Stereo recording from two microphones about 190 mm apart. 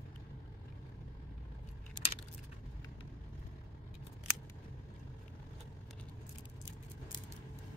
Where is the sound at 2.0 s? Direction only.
25° left (ahead or behind).